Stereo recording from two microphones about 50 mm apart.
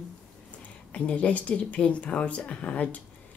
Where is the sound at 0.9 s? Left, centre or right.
Left.